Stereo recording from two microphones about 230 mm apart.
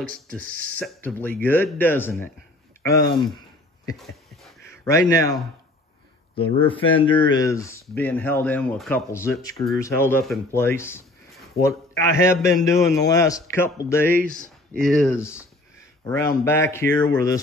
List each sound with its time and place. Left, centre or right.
0.0 s speech: centre
3.9 s a sound: centre
4.8 s speech: centre